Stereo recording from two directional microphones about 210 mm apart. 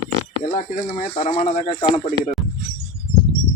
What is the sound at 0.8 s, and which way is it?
Speech, 35° left (ahead or behind).